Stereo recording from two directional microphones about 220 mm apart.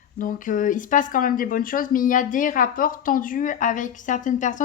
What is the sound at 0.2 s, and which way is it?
Speech, 40° left (ahead or behind).